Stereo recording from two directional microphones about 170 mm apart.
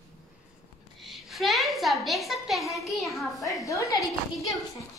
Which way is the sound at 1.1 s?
Centre (ahead or behind).